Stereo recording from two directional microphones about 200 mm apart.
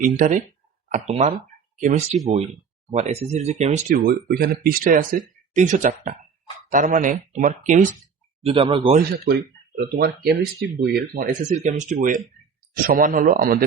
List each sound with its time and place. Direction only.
0.0 s speech: 40° right (ahead or behind)
8.4 s speech: 25° right (ahead or behind)
9.2 s speech: 50° right (ahead or behind)